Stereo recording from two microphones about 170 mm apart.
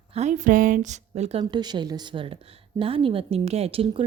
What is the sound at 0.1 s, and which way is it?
A woman's voice, 40° right (ahead or behind).